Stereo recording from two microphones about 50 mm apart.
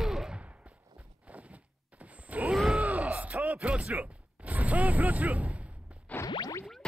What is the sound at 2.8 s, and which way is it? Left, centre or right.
Bellow, right.